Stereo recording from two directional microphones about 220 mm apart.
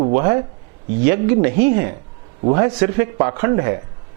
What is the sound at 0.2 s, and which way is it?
Speech, 15° right (ahead or behind).